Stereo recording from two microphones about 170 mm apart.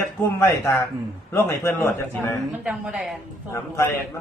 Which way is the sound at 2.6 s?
5° right (ahead or behind).